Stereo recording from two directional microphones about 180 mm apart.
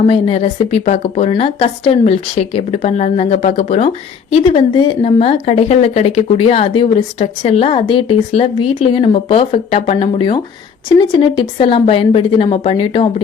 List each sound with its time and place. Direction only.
0.0 s a woman's voice: 35° left (ahead or behind)